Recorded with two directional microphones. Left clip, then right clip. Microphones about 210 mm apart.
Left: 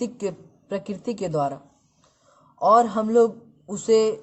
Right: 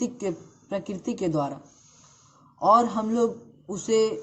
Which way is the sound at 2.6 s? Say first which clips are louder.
Left 2 dB; 50° left (ahead or behind).